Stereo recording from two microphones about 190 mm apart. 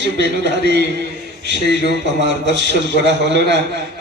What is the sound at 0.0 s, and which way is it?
A man's voice, 65° right (ahead or behind).